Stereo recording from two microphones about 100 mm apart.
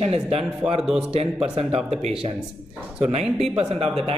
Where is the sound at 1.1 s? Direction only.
75° right (ahead or behind).